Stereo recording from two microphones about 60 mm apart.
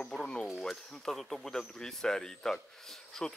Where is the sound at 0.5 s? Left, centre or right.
Centre.